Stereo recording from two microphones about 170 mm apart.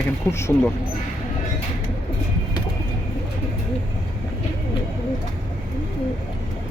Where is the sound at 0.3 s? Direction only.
15° left (ahead or behind).